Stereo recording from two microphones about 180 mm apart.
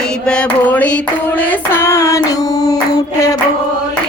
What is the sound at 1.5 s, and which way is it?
Female singing, 15° left (ahead or behind).